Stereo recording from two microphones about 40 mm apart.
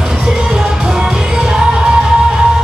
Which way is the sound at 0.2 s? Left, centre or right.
Centre.